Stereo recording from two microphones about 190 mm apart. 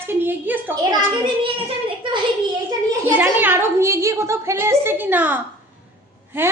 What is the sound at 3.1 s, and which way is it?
A woman's voice, 10° right (ahead or behind).